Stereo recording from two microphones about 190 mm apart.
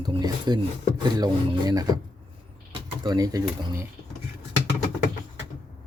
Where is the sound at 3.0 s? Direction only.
20° right (ahead or behind).